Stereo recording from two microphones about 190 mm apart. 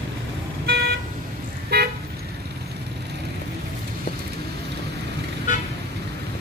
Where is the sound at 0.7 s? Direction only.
60° right (ahead or behind).